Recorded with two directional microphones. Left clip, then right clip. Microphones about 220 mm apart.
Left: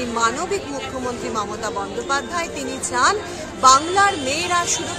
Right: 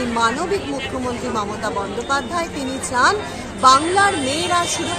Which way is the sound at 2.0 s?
20° left (ahead or behind).